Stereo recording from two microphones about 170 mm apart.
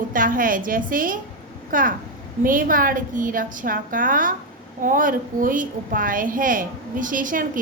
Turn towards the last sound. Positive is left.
turn(degrees=-50)  # may be behind; listen again after turning